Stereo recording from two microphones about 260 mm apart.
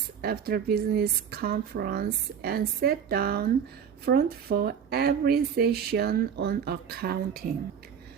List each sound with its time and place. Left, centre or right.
0.2 s speech: right